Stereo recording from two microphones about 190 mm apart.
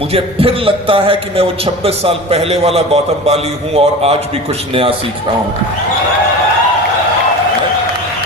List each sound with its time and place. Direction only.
0.1 s a man's voice: 30° right (ahead or behind)